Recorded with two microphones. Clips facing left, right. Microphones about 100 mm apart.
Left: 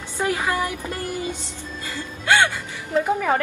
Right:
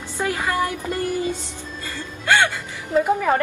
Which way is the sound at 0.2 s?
15° left (ahead or behind).